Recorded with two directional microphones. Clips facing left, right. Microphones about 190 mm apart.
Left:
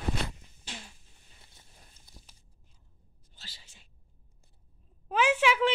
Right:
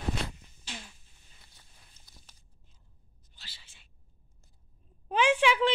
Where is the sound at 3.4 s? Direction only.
40° left (ahead or behind).